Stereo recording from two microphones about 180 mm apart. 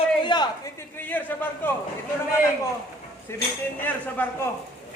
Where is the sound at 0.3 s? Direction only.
25° left (ahead or behind).